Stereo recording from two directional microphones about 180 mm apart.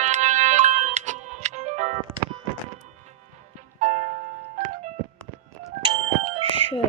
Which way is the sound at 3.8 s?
40° right (ahead or behind).